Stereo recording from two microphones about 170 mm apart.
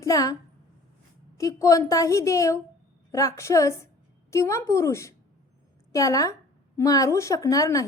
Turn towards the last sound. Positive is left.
turn(degrees=20)  # may be behind; listen again after turning